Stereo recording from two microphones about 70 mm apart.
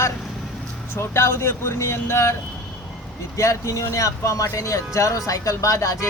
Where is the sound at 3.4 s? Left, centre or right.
Left.